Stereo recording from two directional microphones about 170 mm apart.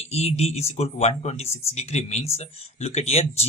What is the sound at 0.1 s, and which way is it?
Speech, 40° left (ahead or behind).